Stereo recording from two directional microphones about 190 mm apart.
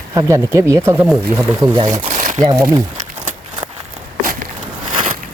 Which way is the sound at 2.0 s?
40° right (ahead or behind).